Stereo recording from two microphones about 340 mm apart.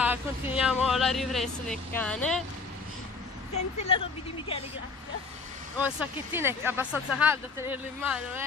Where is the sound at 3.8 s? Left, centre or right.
Centre.